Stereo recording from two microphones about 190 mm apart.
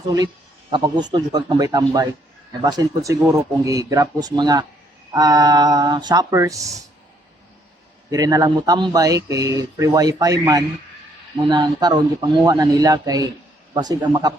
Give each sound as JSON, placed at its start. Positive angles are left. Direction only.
{"t": 0.7, "sound": "speech", "side_deg": -25}
{"t": 8.1, "sound": "speech", "side_deg": -20}